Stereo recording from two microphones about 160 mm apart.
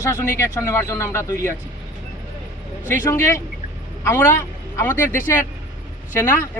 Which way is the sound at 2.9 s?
15° left (ahead or behind).